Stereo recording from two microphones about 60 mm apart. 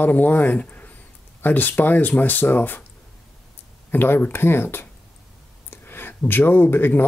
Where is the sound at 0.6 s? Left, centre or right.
Left.